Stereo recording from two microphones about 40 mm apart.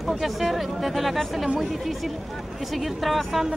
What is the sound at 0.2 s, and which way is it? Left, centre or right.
Speech, centre.